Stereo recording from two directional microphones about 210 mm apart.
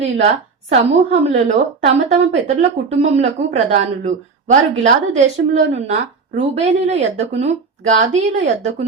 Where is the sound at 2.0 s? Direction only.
30° right (ahead or behind).